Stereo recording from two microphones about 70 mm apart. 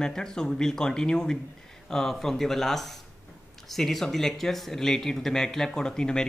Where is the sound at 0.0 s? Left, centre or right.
Centre.